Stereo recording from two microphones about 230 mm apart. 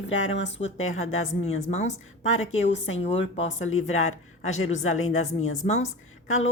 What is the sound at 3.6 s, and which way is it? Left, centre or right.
A woman's voice, left.